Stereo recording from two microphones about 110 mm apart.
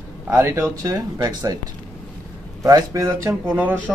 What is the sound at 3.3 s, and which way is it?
Speech, 15° right (ahead or behind).